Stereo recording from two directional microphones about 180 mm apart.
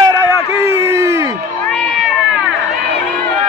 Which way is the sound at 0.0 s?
15° right (ahead or behind).